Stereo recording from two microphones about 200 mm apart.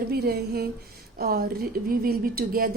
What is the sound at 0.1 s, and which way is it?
Speech, 50° right (ahead or behind).